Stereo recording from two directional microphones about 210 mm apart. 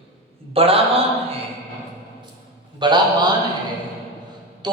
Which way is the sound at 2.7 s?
20° right (ahead or behind).